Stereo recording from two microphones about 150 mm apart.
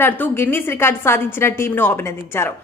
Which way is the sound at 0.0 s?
15° left (ahead or behind).